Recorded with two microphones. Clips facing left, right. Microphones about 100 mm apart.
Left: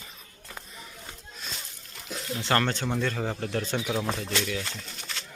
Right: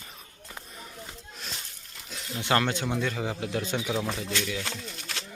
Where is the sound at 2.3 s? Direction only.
15° right (ahead or behind); by 4.1 s centre (ahead or behind).